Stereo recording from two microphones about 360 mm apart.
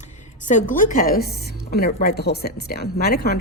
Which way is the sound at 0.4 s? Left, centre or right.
Left.